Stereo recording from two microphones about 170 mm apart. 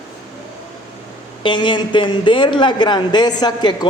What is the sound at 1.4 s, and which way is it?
A man's voice, 30° left (ahead or behind).